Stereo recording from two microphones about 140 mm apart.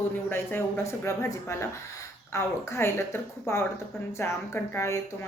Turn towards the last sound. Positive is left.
turn(degrees=20)  # may be behind; listen again after turning